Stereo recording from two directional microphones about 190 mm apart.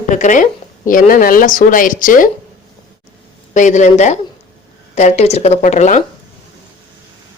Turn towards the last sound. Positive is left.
turn(degrees=40)  # may be behind; listen again after turning